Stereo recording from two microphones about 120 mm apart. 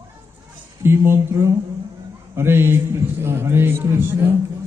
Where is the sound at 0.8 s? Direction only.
20° right (ahead or behind).